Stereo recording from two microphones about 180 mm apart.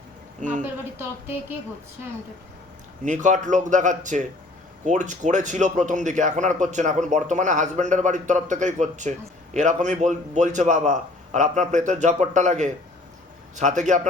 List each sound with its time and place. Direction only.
0.3 s speech: 45° right (ahead or behind)
0.6 s speech: 10° right (ahead or behind)
3.0 s speech: 45° right (ahead or behind)